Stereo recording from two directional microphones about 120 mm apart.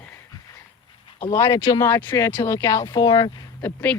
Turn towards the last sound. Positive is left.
turn(degrees=15)  # may be behind; listen again after turning